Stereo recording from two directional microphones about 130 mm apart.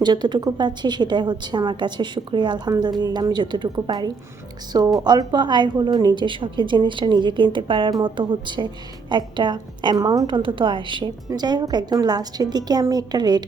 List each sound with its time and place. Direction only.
0.0 s a woman's voice: 35° right (ahead or behind)